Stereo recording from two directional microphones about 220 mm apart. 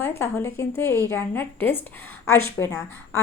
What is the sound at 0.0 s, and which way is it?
A woman's voice, 10° left (ahead or behind).